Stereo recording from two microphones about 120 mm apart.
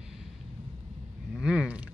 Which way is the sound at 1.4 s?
10° right (ahead or behind).